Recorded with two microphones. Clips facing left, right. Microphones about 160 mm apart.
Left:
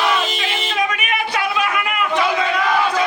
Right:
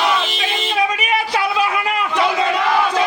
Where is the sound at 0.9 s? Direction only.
35° right (ahead or behind).